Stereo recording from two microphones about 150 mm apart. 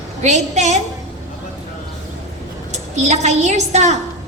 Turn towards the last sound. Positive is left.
turn(degrees=-50)  # may be behind; listen again after turning